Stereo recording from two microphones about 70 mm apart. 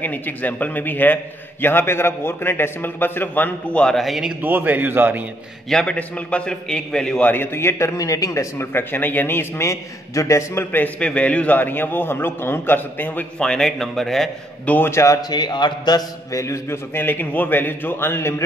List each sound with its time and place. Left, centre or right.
0.0 s a man's voice: left
3.7 s a man's voice: centre
4.0 s a man's voice: centre
4.4 s speech: right
5.7 s a man's voice: centre
5.9 s a man's voice: centre
7.2 s a man's voice: left
8.0 s speech: left
8.5 s a man's voice: left
11.0 s a man's voice: centre
13.4 s a man's voice: centre
14.9 s a man's voice: left
15.2 s a man's voice: left
16.3 s a man's voice: left